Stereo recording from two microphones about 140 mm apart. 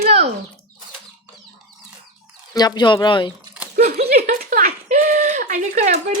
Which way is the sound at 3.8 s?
50° right (ahead or behind).